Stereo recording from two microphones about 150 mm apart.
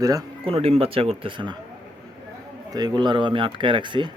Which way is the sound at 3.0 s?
30° right (ahead or behind).